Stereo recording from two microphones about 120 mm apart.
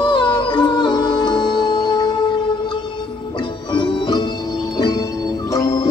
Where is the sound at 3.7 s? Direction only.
40° left (ahead or behind).